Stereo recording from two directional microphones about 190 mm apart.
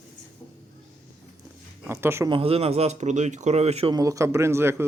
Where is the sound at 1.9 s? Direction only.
15° right (ahead or behind).